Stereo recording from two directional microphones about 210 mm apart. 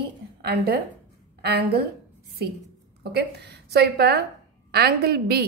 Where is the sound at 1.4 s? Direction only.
50° right (ahead or behind).